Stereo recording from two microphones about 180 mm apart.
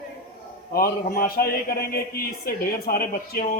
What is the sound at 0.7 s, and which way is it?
A man's voice, 55° left (ahead or behind).